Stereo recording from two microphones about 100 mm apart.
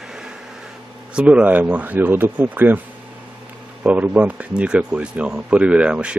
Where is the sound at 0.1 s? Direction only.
5° right (ahead or behind).